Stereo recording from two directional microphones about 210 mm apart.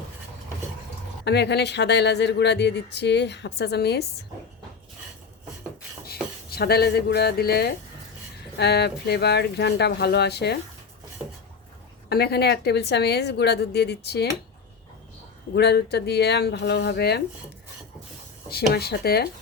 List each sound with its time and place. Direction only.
1.2 s speech: 55° left (ahead or behind)
6.1 s speech: 50° left (ahead or behind)
12.0 s speech: 50° left (ahead or behind)
15.5 s speech: 50° left (ahead or behind)
18.7 s speech: 50° left (ahead or behind)